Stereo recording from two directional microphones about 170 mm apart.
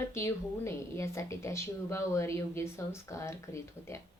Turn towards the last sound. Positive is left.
turn(degrees=15)  # may be behind; listen again after turning